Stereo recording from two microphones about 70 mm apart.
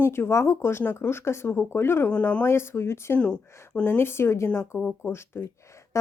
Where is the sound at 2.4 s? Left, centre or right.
Left.